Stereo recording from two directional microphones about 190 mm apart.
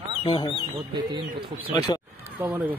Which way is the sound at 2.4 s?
10° right (ahead or behind).